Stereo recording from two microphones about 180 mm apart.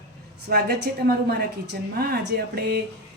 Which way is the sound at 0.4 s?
60° right (ahead or behind).